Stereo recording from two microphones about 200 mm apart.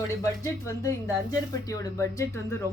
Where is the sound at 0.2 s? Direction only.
15° left (ahead or behind).